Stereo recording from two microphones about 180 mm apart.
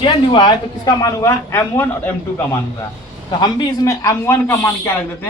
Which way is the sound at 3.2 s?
25° left (ahead or behind).